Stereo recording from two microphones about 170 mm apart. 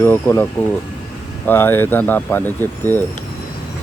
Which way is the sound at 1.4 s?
15° left (ahead or behind).